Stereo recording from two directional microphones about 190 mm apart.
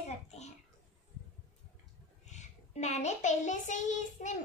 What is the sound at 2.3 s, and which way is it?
Child singing, 35° left (ahead or behind).